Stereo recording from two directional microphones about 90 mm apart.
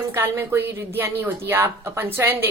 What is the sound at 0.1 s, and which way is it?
A woman's voice, 30° right (ahead or behind).